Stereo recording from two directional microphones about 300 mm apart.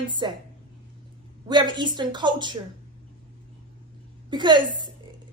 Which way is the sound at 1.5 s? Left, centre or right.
Centre.